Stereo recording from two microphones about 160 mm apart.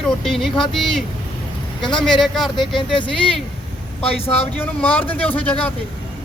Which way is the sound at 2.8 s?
30° left (ahead or behind).